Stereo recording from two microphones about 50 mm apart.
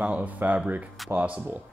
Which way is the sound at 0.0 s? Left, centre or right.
Right.